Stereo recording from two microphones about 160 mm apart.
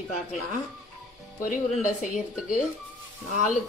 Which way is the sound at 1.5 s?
55° left (ahead or behind).